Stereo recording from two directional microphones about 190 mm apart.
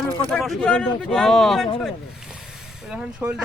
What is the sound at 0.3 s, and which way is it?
Speech, centre (ahead or behind).